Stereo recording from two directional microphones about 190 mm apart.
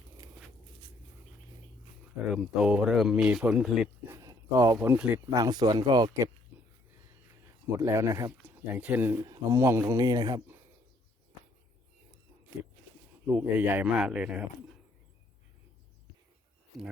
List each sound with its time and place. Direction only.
2.3 s speech: centre (ahead or behind)
4.1 s speech: 15° right (ahead or behind)
6.5 s chop: 10° right (ahead or behind)
7.8 s speech: 15° right (ahead or behind)
13.3 s speech: 10° right (ahead or behind)